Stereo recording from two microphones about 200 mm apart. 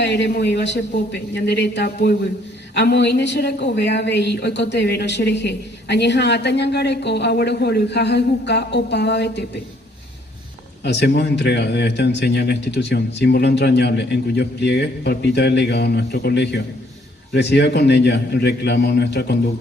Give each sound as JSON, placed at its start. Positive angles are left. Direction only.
{"t": 0.0, "sound": "speech", "side_deg": 55}
{"t": 10.8, "sound": "speech", "side_deg": 55}